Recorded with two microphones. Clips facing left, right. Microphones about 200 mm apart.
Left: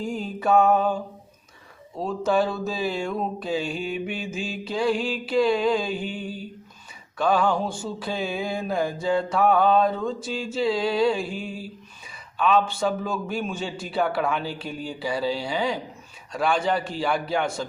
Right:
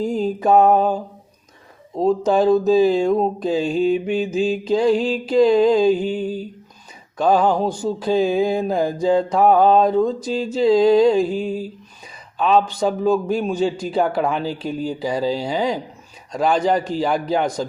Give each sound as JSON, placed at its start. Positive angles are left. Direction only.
{"t": 0.0, "sound": "mantra", "side_deg": -40}
{"t": 2.4, "sound": "mantra", "side_deg": -40}